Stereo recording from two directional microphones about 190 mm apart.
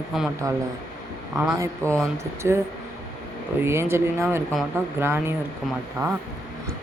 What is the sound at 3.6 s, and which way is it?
A woman's voice, 15° right (ahead or behind).